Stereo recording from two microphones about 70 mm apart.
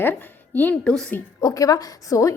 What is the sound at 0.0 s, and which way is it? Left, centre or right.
Speech, left.